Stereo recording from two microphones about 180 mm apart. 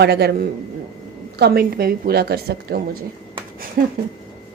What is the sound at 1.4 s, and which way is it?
A woman's voice, 60° right (ahead or behind).